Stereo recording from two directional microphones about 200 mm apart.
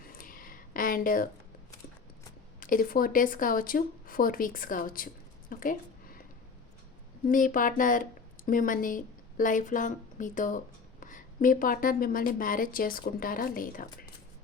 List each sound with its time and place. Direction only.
0.0 s a sound: 45° left (ahead or behind)
2.6 s speech: 45° left (ahead or behind)
7.3 s a woman's voice: 40° left (ahead or behind)